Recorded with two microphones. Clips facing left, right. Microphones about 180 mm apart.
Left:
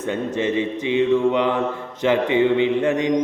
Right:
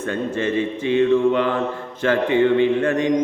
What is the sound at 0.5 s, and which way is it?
Mantra, 15° left (ahead or behind).